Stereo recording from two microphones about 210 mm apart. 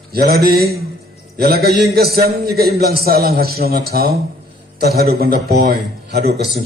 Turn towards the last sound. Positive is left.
turn(degrees=-50)  # may be behind; listen again after turning